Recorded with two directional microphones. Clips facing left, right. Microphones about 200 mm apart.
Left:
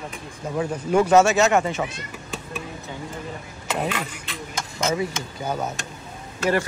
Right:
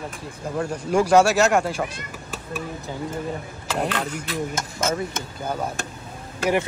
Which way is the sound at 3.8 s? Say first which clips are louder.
Right 3 dB; centre (ahead or behind).